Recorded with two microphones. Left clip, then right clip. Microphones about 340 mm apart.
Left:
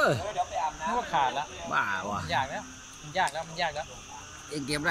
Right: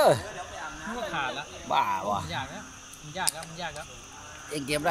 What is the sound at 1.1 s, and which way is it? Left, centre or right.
Speech, centre.